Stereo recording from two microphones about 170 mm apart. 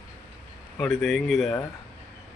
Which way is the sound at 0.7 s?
Centre (ahead or behind).